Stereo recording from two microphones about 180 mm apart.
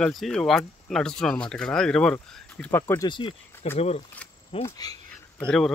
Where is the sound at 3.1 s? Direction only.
30° left (ahead or behind).